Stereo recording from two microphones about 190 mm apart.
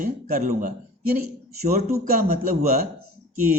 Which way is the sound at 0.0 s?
45° right (ahead or behind).